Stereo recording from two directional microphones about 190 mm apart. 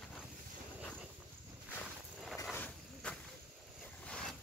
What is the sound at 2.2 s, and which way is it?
Vehicle, centre (ahead or behind).